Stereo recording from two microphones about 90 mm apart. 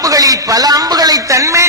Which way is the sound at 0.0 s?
40° right (ahead or behind).